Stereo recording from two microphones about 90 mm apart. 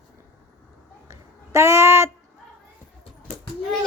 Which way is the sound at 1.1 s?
30° right (ahead or behind).